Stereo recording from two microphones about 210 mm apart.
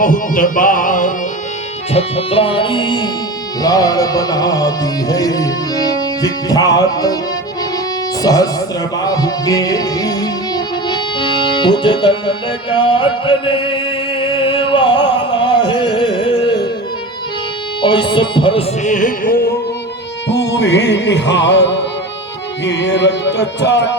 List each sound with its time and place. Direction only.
0.0 s music: 40° left (ahead or behind)
1.9 s music: 30° left (ahead or behind)
8.2 s music: 20° left (ahead or behind)
17.8 s music: 25° left (ahead or behind)
18.8 s music: 35° left (ahead or behind)
20.2 s music: 55° left (ahead or behind)